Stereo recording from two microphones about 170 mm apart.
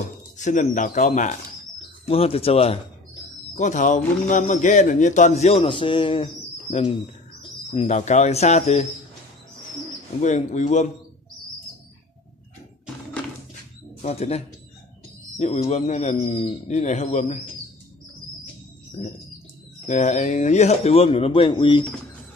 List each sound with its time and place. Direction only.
0.4 s speech: 45° left (ahead or behind)
2.0 s speech: 35° left (ahead or behind)
3.5 s speech: 45° left (ahead or behind)
10.2 s speech: 45° left (ahead or behind)
14.0 s speech: 40° left (ahead or behind)
19.0 s speech: 40° left (ahead or behind)